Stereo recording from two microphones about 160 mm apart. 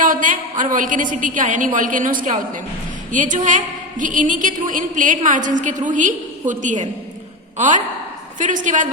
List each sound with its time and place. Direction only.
0.0 s a woman's voice: 55° right (ahead or behind)
8.4 s a woman's voice: 50° right (ahead or behind)